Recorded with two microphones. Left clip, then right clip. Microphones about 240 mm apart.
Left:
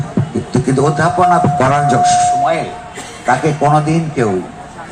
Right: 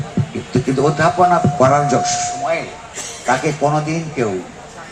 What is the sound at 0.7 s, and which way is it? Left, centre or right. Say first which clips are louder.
A man's voice: left 1 dB; left.